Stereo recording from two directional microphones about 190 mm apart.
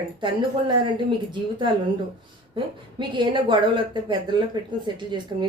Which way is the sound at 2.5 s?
25° right (ahead or behind).